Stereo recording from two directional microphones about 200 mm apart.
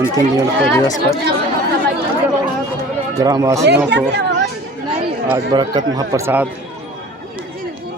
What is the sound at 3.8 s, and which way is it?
Speech, 60° right (ahead or behind).